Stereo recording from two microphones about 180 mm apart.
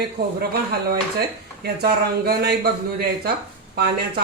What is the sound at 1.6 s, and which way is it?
Speech, 60° right (ahead or behind).